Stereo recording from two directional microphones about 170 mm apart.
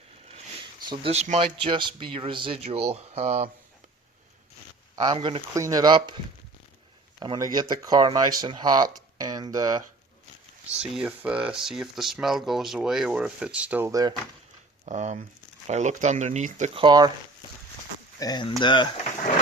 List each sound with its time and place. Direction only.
0.9 s speech: 35° right (ahead or behind)
4.9 s speech: 25° right (ahead or behind)
5.5 s speech: 20° right (ahead or behind)
7.2 s speech: 25° right (ahead or behind)
10.7 s speech: 5° right (ahead or behind)
14.8 s speech: 45° right (ahead or behind)
16.8 s speech: 25° right (ahead or behind)
18.2 s speech: 25° left (ahead or behind)